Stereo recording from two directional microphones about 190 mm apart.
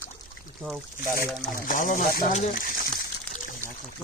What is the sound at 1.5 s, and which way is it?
Speech, 45° left (ahead or behind).